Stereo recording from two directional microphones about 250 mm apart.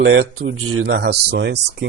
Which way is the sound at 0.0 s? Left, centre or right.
Right.